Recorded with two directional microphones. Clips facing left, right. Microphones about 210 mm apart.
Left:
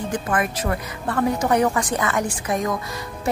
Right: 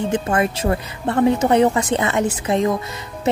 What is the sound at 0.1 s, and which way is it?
A woman's voice, 25° right (ahead or behind).